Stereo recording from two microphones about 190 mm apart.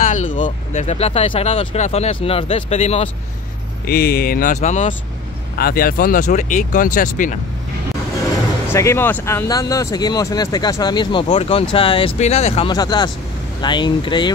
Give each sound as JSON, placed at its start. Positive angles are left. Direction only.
{"t": 0.0, "sound": "speech", "side_deg": 40}
{"t": 3.8, "sound": "speech", "side_deg": 55}
{"t": 5.6, "sound": "speech", "side_deg": 50}
{"t": 8.6, "sound": "speech", "side_deg": 15}